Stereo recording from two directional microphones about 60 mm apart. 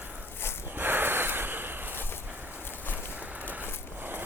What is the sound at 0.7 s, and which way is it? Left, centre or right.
Snort, right.